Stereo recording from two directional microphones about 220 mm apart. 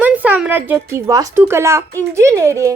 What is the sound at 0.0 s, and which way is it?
Speech, 5° right (ahead or behind).